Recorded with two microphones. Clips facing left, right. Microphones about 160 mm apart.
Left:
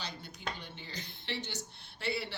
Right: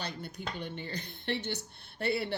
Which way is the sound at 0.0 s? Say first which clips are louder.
Right 3 dB; 55° right (ahead or behind).